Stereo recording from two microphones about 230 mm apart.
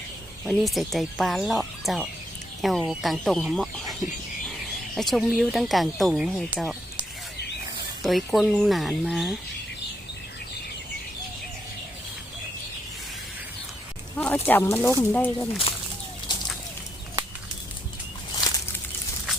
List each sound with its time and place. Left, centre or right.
0.4 s speech: centre
4.9 s speech: centre
8.0 s speech: centre
14.2 s speech: centre
16.3 s a sound: centre
18.3 s a sound: centre